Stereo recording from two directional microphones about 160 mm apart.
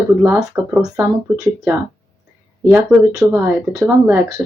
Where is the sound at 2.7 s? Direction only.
15° right (ahead or behind).